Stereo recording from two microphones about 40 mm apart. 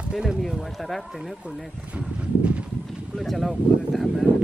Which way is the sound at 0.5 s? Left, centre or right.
Centre.